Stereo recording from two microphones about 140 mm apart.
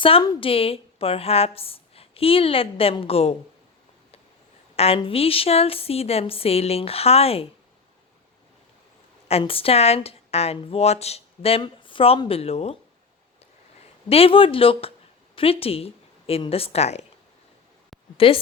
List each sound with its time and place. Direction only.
0.0 s a woman's voice: 35° left (ahead or behind)
4.9 s a woman's voice: 40° left (ahead or behind)
9.4 s a woman's voice: 40° left (ahead or behind)
14.1 s a woman's voice: 40° left (ahead or behind)
18.2 s speech: 40° left (ahead or behind)